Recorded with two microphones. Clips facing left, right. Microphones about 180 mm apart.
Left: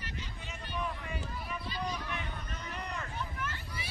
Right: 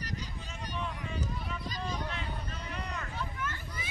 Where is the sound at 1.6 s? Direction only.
40° right (ahead or behind).